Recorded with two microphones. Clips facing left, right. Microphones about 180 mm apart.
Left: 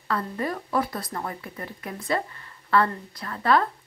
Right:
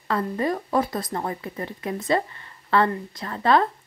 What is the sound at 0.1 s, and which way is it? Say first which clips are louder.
A woman's voice: right 4 dB; 25° right (ahead or behind).